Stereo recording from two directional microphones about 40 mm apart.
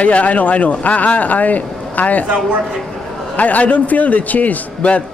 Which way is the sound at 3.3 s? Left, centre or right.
Left.